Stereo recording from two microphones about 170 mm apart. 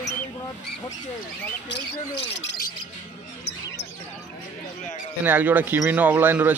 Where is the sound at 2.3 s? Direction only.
90° left.